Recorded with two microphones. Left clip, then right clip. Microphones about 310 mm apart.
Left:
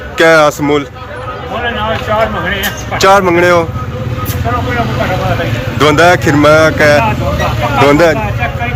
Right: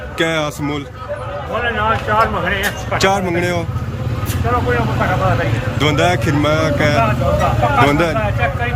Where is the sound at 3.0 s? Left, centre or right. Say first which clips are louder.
Left 10 dB; centre.